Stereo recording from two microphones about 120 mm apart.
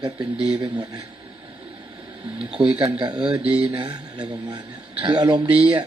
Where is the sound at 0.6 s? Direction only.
35° right (ahead or behind).